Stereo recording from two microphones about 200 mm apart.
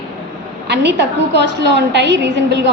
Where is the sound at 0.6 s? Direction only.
60° right (ahead or behind).